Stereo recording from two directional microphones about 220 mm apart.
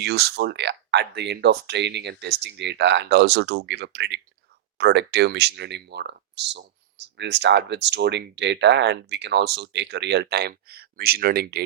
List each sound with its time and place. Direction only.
0.0 s speech: 50° right (ahead or behind)